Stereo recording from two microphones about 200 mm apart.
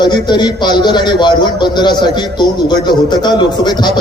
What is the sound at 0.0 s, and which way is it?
A man's voice, 20° left (ahead or behind).